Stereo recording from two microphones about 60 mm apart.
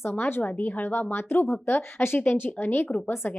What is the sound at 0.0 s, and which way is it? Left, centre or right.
Speech, left.